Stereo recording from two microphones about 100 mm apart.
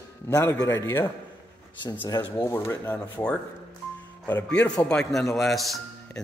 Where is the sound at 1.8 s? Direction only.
45° left (ahead or behind).